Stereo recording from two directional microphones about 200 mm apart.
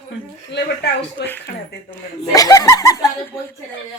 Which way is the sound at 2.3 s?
20° left (ahead or behind).